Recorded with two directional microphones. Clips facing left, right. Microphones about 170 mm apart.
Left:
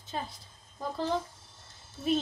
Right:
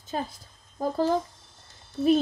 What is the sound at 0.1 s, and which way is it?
Speech, 50° right (ahead or behind).